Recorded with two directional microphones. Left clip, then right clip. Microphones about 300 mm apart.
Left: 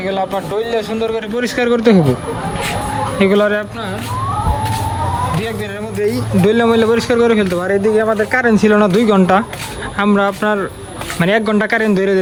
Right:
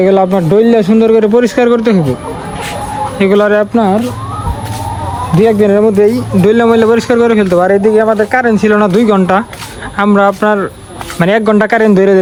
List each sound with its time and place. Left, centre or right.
0.6 s a man's voice: centre
1.4 s speech: centre
3.2 s speech: centre
5.4 s speech: centre